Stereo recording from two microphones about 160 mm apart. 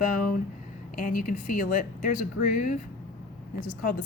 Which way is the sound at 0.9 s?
60° left (ahead or behind).